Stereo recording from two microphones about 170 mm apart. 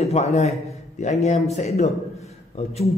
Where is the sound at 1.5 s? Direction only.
40° left (ahead or behind).